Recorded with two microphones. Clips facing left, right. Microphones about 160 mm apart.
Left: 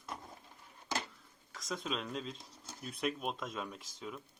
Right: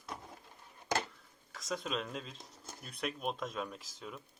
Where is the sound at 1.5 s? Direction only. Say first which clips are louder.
Right 1 dB; centre (ahead or behind).